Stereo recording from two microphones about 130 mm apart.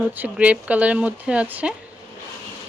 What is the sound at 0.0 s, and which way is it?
Speech, 10° right (ahead or behind).